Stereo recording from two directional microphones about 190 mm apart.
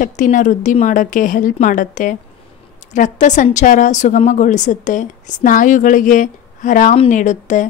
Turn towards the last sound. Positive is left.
turn(degrees=40)  # may be behind; listen again after turning